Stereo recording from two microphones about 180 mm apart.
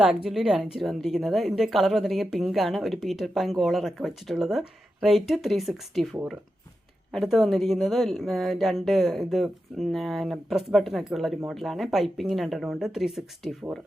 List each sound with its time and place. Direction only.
0.0 s a woman's voice: 5° right (ahead or behind)
7.1 s a woman's voice: centre (ahead or behind)